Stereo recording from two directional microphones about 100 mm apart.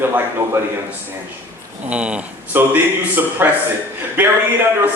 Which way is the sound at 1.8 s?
10° right (ahead or behind).